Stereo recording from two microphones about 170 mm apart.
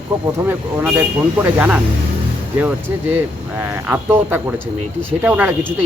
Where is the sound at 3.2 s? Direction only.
10° right (ahead or behind).